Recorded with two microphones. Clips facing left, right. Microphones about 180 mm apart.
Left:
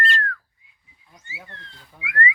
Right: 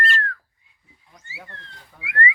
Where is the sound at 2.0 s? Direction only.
25° right (ahead or behind).